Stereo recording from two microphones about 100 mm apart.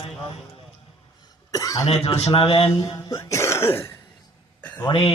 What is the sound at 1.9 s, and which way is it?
Speech, 90° left.